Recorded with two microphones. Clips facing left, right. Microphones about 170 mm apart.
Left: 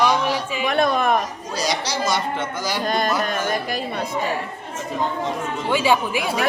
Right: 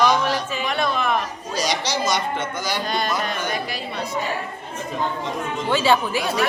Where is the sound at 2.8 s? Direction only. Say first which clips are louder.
Left 5 dB; 45° left (ahead or behind).